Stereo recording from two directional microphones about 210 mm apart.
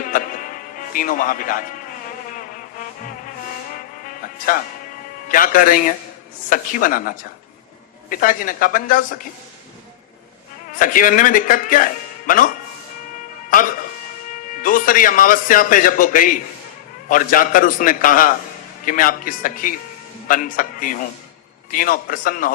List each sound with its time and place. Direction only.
0.1 s speech: 40° left (ahead or behind)
5.3 s a man's voice: 40° left (ahead or behind)
10.8 s a man's voice: 40° left (ahead or behind)